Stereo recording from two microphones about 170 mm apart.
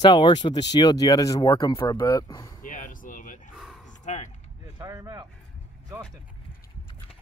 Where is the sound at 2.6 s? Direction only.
50° left (ahead or behind).